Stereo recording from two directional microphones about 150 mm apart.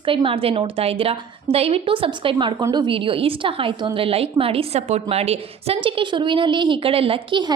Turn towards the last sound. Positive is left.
turn(degrees=-35)  # may be behind; listen again after turning